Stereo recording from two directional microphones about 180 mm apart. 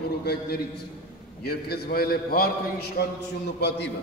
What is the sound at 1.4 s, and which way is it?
A man's voice, 60° left (ahead or behind).